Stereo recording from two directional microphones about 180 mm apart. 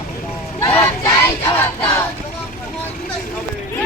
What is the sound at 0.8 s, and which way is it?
Child singing, 15° left (ahead or behind).